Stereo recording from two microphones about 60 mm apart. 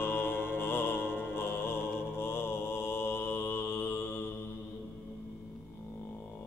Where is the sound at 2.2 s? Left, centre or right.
Left.